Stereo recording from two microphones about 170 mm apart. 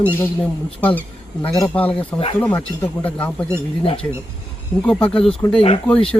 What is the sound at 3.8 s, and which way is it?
Speech, 30° left (ahead or behind).